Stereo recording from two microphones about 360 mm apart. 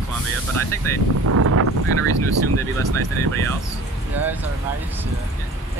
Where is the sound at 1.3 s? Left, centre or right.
Right.